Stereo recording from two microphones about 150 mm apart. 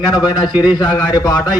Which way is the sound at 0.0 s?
30° left (ahead or behind).